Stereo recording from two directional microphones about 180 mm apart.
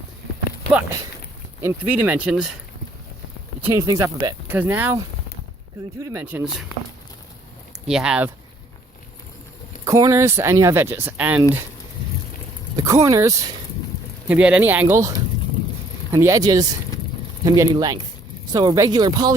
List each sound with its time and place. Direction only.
0.7 s speech: 10° right (ahead or behind)
3.6 s speech: 15° right (ahead or behind)
6.0 s speech: 15° right (ahead or behind)
7.9 s speech: 5° right (ahead or behind)
9.8 s speech: 15° right (ahead or behind)
12.7 s speech: 15° right (ahead or behind)
14.3 s speech: 5° right (ahead or behind)
16.1 s speech: 20° right (ahead or behind)